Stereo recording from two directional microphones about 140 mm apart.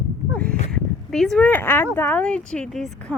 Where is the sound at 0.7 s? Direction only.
5° left (ahead or behind).